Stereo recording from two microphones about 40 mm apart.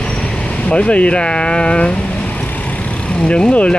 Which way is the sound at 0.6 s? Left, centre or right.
Left.